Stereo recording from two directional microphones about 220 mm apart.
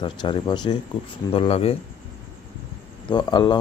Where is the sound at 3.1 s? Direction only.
20° left (ahead or behind).